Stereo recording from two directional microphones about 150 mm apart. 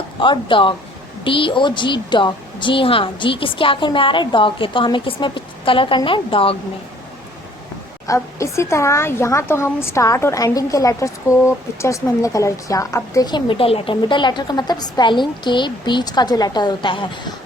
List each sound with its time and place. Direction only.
0.2 s a woman's voice: 35° left (ahead or behind)
8.0 s speech: 20° left (ahead or behind)